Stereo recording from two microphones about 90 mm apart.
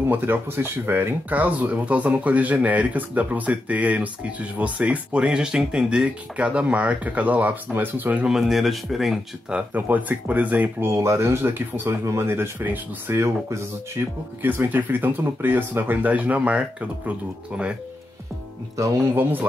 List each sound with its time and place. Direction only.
0.1 s speech: 25° right (ahead or behind)
8.3 s speech: 5° right (ahead or behind)
9.8 s speech: 20° right (ahead or behind)
10.9 s speech: 35° right (ahead or behind)
13.1 s speech: 35° right (ahead or behind)
14.4 s speech: 20° right (ahead or behind)